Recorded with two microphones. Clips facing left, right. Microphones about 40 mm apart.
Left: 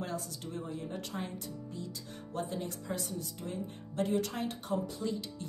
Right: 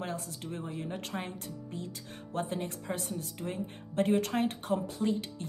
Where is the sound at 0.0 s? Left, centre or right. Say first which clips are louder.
Right 1 dB; right.